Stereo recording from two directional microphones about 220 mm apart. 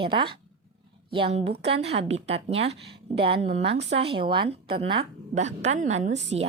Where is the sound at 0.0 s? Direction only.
25° right (ahead or behind).